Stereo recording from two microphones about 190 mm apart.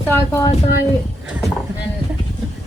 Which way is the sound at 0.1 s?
15° left (ahead or behind).